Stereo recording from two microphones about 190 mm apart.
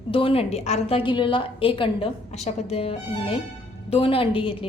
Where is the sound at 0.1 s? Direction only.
30° left (ahead or behind).